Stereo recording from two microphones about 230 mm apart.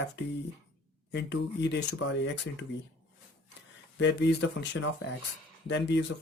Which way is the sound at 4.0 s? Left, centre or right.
Left.